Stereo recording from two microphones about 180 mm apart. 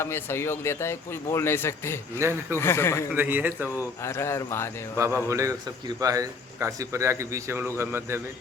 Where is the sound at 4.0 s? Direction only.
15° left (ahead or behind).